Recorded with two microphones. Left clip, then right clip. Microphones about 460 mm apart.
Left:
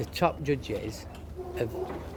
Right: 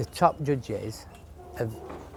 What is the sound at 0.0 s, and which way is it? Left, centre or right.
Speech, right.